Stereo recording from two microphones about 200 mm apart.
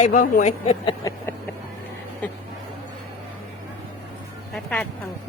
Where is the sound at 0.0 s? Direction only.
40° left (ahead or behind).